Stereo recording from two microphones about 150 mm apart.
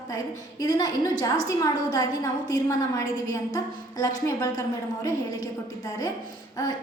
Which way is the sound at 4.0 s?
25° left (ahead or behind).